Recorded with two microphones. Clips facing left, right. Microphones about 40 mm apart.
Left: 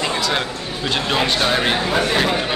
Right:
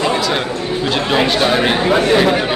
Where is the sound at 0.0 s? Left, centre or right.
Centre.